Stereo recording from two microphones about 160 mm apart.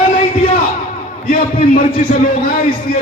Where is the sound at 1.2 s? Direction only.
55° left (ahead or behind).